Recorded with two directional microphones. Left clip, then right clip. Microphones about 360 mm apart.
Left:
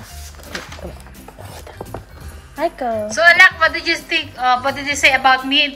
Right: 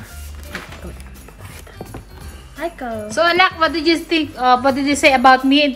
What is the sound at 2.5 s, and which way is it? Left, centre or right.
Speech, centre.